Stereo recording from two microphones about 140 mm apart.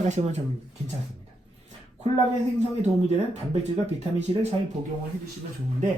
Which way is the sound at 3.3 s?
50° right (ahead or behind).